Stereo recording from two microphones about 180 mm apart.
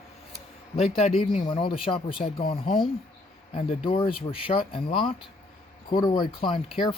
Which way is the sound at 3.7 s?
30° left (ahead or behind).